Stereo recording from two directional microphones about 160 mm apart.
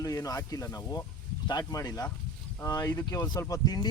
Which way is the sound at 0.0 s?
20° left (ahead or behind).